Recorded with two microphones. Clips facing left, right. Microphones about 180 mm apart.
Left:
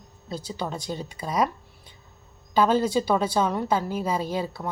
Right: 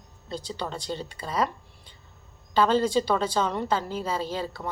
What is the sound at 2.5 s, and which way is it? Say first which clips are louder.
Speech: left 1 dB; 10° left (ahead or behind).